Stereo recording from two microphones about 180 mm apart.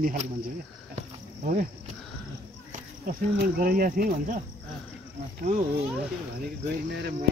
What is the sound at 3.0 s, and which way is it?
Speech, 55° right (ahead or behind).